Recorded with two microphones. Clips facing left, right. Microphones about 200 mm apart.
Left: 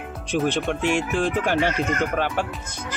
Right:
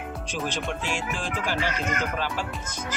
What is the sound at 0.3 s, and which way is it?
Speech, 60° left (ahead or behind).